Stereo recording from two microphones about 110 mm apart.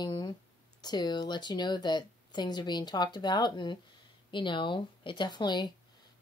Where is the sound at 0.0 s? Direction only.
40° left (ahead or behind).